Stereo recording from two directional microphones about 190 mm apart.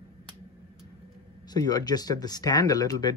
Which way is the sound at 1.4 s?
20° left (ahead or behind).